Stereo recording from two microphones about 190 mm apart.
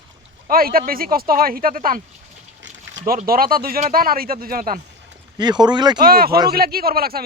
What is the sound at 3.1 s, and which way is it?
A man's voice, 50° right (ahead or behind).